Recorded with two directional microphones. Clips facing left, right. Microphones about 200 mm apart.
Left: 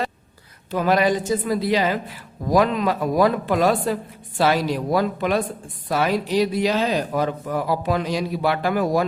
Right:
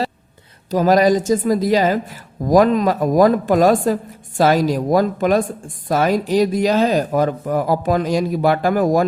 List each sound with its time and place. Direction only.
0.7 s speech: 40° right (ahead or behind)